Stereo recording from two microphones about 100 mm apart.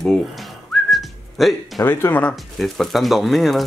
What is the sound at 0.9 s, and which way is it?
Whistling, centre (ahead or behind).